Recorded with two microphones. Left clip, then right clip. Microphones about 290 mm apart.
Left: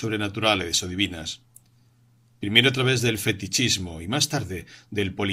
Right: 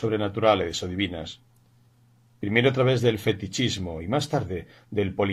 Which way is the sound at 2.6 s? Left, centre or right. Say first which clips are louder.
Left 2 dB; left.